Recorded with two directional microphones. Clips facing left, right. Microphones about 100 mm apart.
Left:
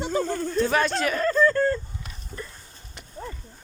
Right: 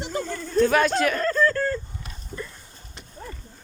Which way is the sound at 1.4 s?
20° left (ahead or behind).